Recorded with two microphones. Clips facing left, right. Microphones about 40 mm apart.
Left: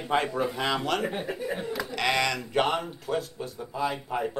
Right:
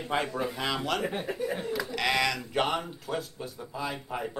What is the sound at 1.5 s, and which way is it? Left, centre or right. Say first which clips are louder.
Speech: left 1 dB; centre.